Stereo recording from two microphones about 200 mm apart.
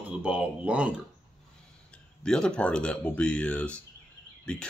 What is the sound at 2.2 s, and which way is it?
Speech, 5° left (ahead or behind).